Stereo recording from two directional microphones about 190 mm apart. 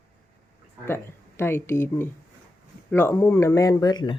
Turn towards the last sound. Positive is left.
turn(degrees=20)  # may be behind; listen again after turning